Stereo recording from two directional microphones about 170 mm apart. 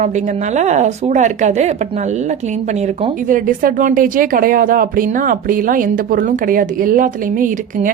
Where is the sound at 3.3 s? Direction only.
55° right (ahead or behind).